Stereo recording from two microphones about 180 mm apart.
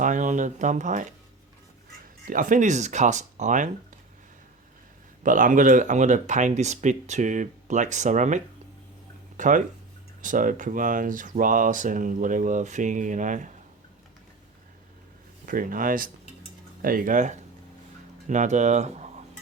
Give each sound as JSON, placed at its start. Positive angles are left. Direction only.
{"t": 0.0, "sound": "a sound", "side_deg": -45}
{"t": 2.2, "sound": "speech", "side_deg": -50}
{"t": 5.2, "sound": "speech", "side_deg": -45}
{"t": 9.4, "sound": "speech", "side_deg": -45}
{"t": 15.4, "sound": "speech", "side_deg": -50}